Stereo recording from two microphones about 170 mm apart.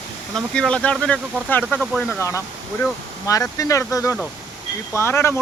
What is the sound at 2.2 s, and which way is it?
Speech, 15° left (ahead or behind).